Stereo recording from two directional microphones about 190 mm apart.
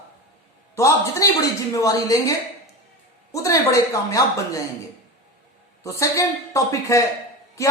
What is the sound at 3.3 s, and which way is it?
A woman's voice, 15° left (ahead or behind).